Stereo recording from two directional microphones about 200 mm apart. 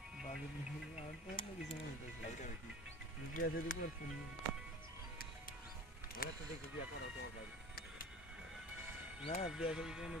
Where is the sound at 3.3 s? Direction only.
45° left (ahead or behind).